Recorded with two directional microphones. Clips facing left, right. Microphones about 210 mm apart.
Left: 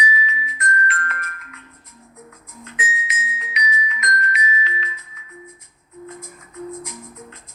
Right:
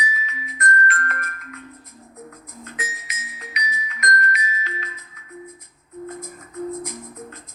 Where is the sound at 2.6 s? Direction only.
40° right (ahead or behind).